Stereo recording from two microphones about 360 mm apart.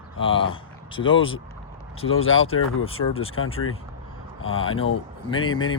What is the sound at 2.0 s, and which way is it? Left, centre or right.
Speech, left.